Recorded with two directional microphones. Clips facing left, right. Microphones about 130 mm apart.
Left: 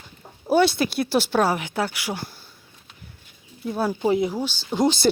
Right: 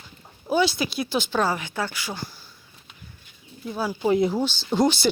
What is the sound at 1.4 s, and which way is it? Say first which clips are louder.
Speech: left 3 dB; 10° left (ahead or behind).